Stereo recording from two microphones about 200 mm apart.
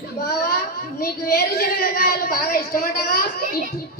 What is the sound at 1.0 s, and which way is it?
A woman's voice, 50° left (ahead or behind).